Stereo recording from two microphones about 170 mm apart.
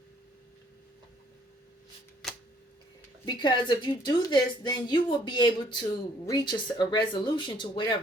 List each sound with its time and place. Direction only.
3.2 s a woman's voice: 25° left (ahead or behind)